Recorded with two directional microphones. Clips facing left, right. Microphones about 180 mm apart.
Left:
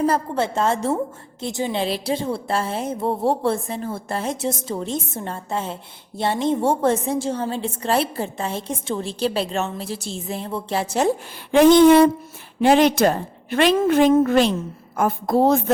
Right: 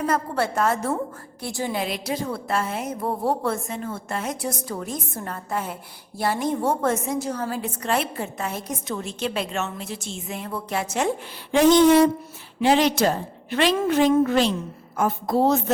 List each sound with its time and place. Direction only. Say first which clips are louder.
0.0 s a woman's voice: left 3 dB; 25° left (ahead or behind)
11.5 s a woman's voice: left 4 dB; 55° left (ahead or behind)